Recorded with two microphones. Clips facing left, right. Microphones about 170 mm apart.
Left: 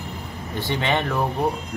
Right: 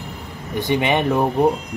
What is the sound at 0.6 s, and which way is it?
Speech, 15° right (ahead or behind).